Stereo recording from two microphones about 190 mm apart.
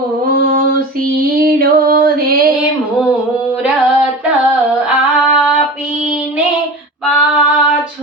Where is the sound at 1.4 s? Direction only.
50° right (ahead or behind).